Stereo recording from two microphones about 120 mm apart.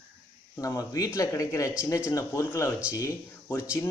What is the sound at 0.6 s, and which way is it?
Speech, 30° left (ahead or behind).